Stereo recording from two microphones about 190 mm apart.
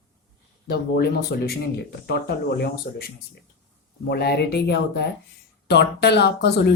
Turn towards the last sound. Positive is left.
turn(degrees=60)  # may be behind; listen again after turning